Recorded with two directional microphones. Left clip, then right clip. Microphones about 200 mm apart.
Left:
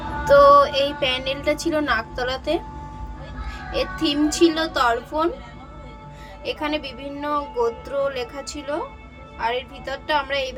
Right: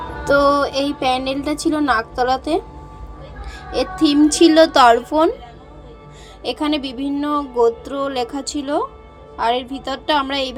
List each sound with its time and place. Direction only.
0.6 s a woman's voice: 25° right (ahead or behind)
6.4 s a woman's voice: 30° right (ahead or behind)